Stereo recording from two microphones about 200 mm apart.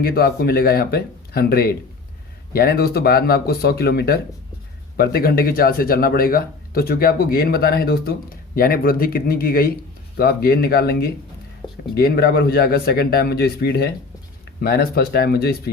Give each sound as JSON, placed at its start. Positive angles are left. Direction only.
{"t": 0.0, "sound": "speech", "side_deg": 50}